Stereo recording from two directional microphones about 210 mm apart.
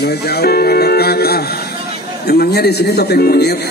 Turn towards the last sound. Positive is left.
turn(degrees=50)  # may be behind; listen again after turning